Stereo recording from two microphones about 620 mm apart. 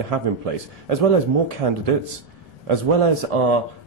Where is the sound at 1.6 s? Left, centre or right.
Right.